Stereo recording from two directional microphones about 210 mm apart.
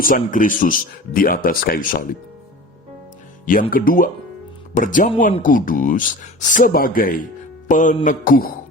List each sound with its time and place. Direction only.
0.0 s speech: 40° left (ahead or behind)
3.4 s speech: 40° left (ahead or behind)